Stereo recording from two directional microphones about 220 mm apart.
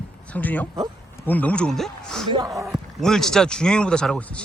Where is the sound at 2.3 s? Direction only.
15° right (ahead or behind).